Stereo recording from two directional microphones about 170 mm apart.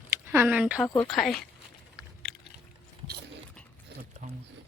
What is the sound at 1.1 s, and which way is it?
Speech, centre (ahead or behind).